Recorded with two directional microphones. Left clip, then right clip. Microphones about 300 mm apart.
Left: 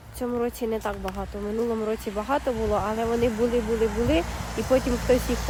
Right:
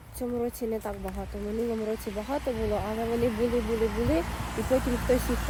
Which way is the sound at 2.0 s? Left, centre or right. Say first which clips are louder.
Left 6 dB; left.